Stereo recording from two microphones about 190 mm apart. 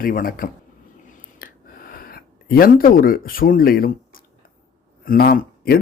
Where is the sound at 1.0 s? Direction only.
45° left (ahead or behind).